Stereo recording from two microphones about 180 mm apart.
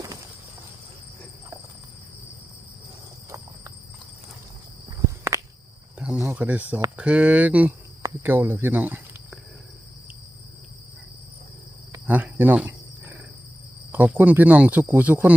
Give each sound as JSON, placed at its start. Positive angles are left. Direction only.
{"t": 4.9, "sound": "walk", "side_deg": -20}
{"t": 6.0, "sound": "a sound", "side_deg": -10}
{"t": 6.9, "sound": "speech", "side_deg": -5}
{"t": 11.9, "sound": "cricket", "side_deg": -10}
{"t": 13.9, "sound": "speech", "side_deg": -10}